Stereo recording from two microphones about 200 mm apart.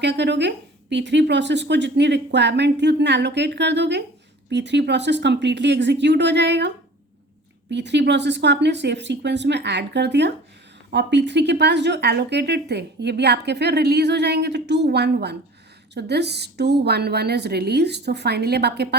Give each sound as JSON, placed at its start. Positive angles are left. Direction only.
{"t": 0.0, "sound": "speech", "side_deg": -60}